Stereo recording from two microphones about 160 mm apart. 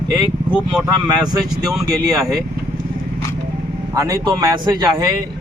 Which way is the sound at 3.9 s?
20° right (ahead or behind).